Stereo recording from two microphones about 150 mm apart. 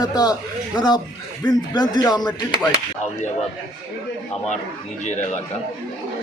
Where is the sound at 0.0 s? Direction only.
25° left (ahead or behind).